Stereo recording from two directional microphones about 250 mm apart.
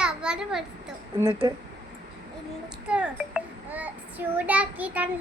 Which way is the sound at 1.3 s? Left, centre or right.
Right.